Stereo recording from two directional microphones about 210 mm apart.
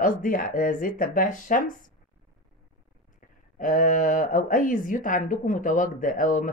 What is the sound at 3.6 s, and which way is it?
Speech, 40° left (ahead or behind).